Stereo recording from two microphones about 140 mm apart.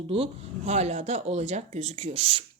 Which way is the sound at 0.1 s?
45° right (ahead or behind).